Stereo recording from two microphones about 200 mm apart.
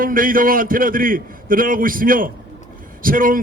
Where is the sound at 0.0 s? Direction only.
45° right (ahead or behind).